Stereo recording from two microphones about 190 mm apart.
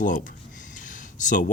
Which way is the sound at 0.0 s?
45° left (ahead or behind).